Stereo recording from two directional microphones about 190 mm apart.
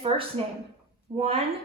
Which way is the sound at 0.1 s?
30° right (ahead or behind).